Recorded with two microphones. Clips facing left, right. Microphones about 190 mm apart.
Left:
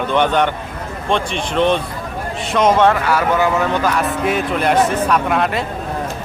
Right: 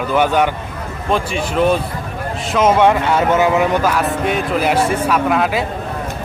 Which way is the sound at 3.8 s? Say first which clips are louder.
Right 1 dB; centre (ahead or behind).